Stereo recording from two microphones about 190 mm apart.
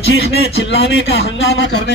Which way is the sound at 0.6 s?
70° left (ahead or behind).